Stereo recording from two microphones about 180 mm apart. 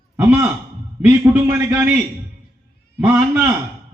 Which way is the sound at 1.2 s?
10° right (ahead or behind).